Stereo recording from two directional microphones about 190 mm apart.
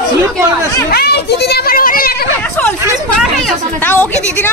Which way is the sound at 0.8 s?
55° left (ahead or behind).